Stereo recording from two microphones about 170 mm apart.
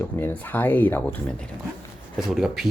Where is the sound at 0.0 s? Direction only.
10° left (ahead or behind).